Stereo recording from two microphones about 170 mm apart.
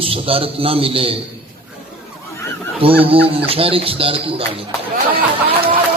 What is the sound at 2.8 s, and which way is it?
A man's voice, 35° right (ahead or behind).